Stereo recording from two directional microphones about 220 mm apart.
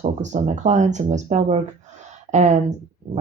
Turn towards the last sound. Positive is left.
turn(degrees=-30)  # may be behind; listen again after turning